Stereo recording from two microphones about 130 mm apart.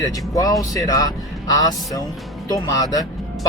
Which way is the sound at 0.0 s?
30° left (ahead or behind).